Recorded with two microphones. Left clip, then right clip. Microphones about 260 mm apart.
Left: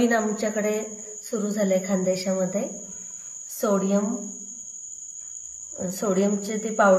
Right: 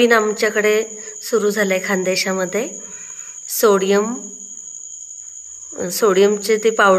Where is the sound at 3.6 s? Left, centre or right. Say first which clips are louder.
Right 10 dB; right.